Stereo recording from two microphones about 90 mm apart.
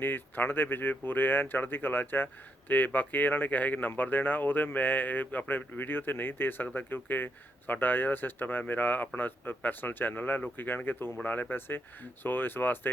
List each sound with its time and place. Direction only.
0.0 s speech: 20° left (ahead or behind)